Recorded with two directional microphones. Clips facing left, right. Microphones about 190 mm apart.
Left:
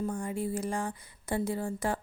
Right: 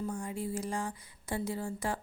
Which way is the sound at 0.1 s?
55° left (ahead or behind).